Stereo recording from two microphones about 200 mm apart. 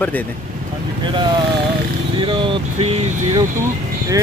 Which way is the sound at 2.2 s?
25° right (ahead or behind).